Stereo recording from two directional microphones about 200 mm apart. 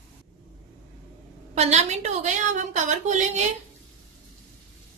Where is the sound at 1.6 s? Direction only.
35° right (ahead or behind).